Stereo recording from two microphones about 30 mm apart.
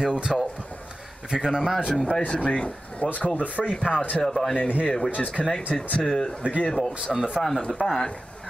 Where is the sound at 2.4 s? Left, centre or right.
Left.